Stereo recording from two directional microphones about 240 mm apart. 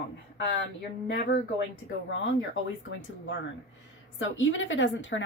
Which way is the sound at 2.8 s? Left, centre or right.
Left.